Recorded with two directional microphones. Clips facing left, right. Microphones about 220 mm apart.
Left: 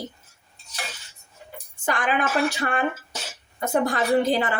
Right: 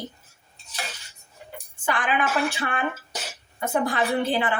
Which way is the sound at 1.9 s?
40° left (ahead or behind).